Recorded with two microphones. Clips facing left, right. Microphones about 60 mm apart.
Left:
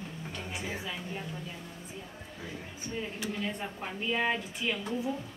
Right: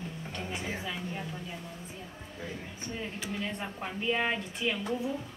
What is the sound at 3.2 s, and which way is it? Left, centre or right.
A woman's voice, centre.